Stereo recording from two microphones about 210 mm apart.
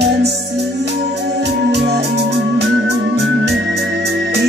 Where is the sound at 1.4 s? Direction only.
50° right (ahead or behind).